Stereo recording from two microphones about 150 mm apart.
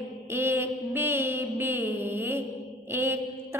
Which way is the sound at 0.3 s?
15° right (ahead or behind).